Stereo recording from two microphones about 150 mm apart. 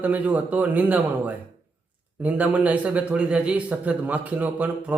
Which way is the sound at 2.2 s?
10° right (ahead or behind).